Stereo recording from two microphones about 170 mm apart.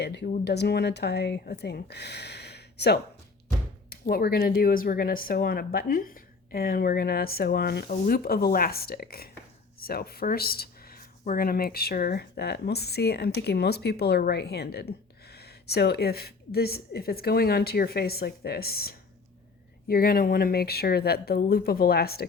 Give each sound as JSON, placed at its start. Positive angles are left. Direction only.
{"t": 0.0, "sound": "speech", "side_deg": 80}
{"t": 4.0, "sound": "speech", "side_deg": 65}